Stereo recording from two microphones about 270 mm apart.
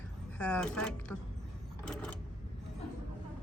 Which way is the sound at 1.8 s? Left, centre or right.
Centre.